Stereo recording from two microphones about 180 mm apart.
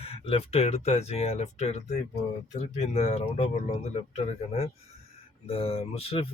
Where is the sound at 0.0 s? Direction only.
30° left (ahead or behind).